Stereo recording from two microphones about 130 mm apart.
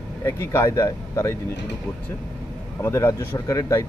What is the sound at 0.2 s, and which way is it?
Speech, 20° left (ahead or behind).